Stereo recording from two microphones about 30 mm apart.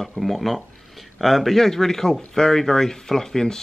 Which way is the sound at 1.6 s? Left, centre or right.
Centre.